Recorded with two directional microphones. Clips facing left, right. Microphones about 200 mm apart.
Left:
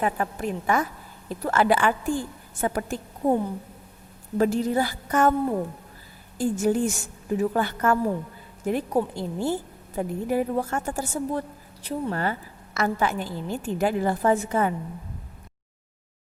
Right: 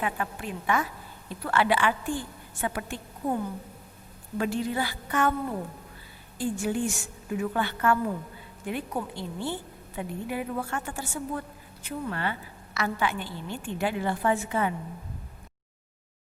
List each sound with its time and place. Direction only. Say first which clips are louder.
0.0 s a woman's voice: left 5 dB; 40° left (ahead or behind)
4.4 s a woman's voice: left 6 dB; 40° left (ahead or behind)
6.4 s a woman's voice: left 5 dB; 40° left (ahead or behind)